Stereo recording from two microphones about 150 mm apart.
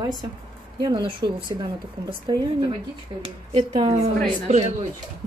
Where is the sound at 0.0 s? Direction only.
30° right (ahead or behind).